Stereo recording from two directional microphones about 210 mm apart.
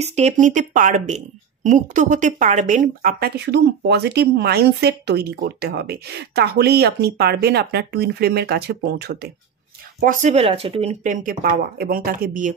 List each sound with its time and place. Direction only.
0.0 s speech: 30° right (ahead or behind); by 9.1 s 50° right (ahead or behind)
10.2 s speech: 30° right (ahead or behind)